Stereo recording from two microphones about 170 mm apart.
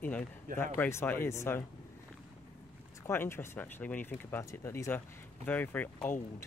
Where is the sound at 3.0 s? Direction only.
15° left (ahead or behind).